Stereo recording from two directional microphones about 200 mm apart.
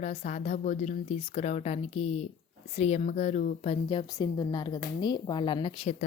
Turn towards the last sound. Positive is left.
turn(degrees=25)  # may be behind; listen again after turning